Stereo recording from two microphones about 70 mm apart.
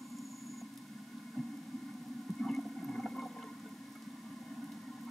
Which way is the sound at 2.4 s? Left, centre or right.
Centre.